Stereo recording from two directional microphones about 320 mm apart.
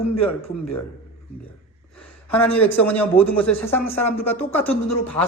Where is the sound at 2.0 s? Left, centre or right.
Centre.